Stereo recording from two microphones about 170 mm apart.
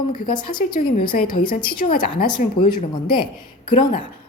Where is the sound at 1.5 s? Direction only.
55° left (ahead or behind).